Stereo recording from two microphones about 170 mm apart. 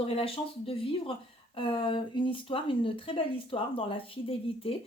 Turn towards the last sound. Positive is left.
turn(degrees=35)  # may be behind; listen again after turning